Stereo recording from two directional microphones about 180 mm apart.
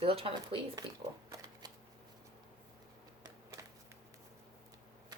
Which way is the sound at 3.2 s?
20° right (ahead or behind).